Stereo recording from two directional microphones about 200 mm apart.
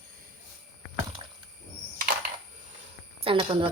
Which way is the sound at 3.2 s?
25° right (ahead or behind).